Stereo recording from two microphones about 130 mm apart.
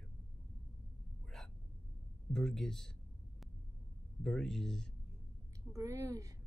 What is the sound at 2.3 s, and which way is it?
Speech, 5° left (ahead or behind).